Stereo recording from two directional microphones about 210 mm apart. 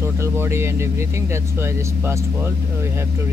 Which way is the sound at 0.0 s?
10° right (ahead or behind).